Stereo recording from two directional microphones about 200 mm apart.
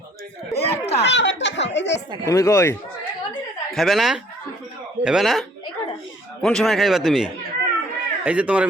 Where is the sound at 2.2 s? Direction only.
15° left (ahead or behind).